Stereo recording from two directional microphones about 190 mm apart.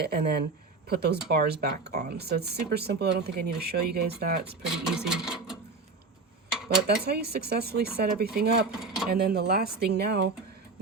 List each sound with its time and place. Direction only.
0.0 s speech: 55° right (ahead or behind)
4.7 s a sound: 5° right (ahead or behind)
6.8 s speech: 55° right (ahead or behind)
8.7 s speech: 5° right (ahead or behind)
9.0 s speech: 55° right (ahead or behind)